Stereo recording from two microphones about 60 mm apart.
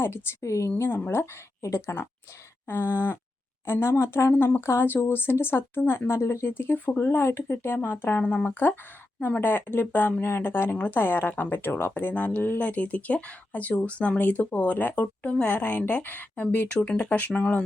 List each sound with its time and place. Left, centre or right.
0.0 s a woman's voice: left
0.8 s speech: left
1.6 s speech: left
2.6 s speech: left
6.1 s speech: left
6.5 s speech: left
8.2 s speech: left